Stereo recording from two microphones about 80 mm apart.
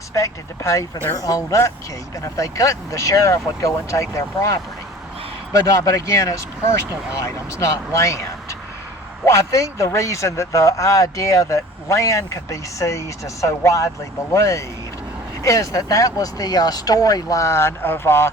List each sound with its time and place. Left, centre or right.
0.1 s speech: left